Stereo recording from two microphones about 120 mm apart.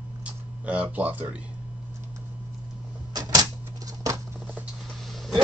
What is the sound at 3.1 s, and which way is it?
Typewriter, 30° right (ahead or behind).